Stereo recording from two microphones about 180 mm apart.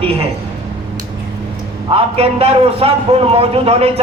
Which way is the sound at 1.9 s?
35° right (ahead or behind).